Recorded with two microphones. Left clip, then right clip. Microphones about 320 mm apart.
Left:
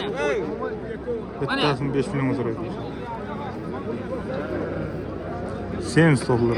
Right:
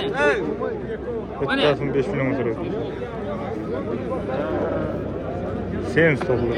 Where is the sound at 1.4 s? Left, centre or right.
Centre.